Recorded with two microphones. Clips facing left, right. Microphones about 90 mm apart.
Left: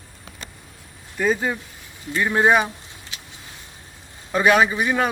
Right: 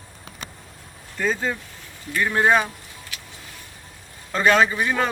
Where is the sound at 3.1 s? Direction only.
25° left (ahead or behind).